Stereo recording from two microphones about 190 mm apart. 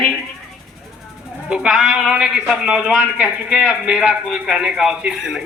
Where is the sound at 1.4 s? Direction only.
5° right (ahead or behind).